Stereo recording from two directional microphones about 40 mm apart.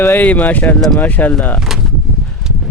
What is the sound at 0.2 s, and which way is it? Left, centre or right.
Speech, left.